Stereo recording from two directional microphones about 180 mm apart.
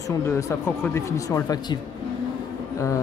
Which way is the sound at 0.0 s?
15° left (ahead or behind).